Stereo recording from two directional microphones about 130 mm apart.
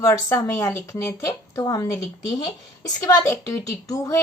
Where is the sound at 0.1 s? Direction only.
20° left (ahead or behind).